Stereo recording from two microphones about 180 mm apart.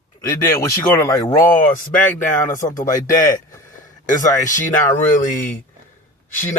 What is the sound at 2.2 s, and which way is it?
Speech, 45° left (ahead or behind).